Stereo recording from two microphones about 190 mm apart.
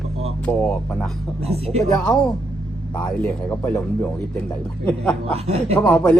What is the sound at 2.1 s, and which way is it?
Speech, centre (ahead or behind).